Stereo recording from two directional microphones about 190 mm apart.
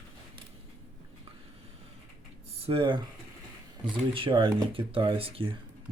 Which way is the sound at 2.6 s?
25° right (ahead or behind).